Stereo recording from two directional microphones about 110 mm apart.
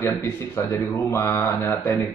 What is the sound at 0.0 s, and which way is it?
A man's voice, 25° left (ahead or behind).